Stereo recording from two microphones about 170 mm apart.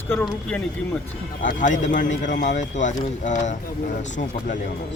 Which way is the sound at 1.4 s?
50° left (ahead or behind).